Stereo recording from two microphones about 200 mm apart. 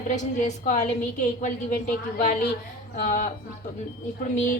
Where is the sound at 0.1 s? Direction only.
40° left (ahead or behind).